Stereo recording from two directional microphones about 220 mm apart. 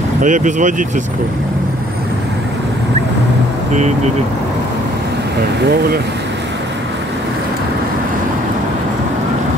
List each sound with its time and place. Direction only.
0.2 s speech: 35° right (ahead or behind)